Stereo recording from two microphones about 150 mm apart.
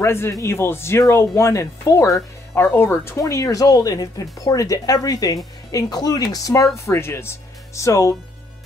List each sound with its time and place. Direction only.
0.0 s speech: 15° left (ahead or behind)